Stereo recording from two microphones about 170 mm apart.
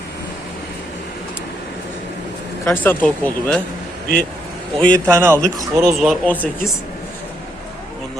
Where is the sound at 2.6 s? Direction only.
10° left (ahead or behind).